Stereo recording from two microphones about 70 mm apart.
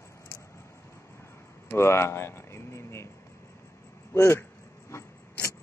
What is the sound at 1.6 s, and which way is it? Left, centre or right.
Speech, left.